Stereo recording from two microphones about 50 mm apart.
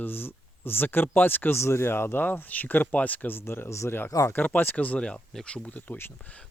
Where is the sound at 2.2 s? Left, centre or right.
Left.